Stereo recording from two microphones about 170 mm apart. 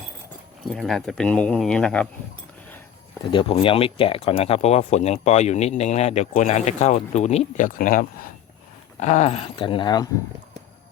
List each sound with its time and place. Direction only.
0.6 s speech: centre (ahead or behind)
3.3 s speech: 30° left (ahead or behind)